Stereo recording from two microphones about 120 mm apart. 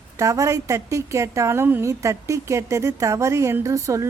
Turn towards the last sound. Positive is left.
turn(degrees=-25)  # may be behind; listen again after turning